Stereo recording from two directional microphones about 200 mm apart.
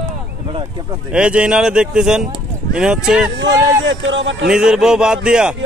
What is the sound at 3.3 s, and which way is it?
Speech, 65° right (ahead or behind).